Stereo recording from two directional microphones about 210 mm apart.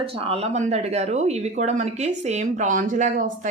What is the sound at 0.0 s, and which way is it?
A woman's voice, 30° right (ahead or behind).